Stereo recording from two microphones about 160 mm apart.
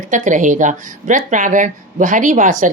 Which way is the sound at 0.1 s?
50° right (ahead or behind).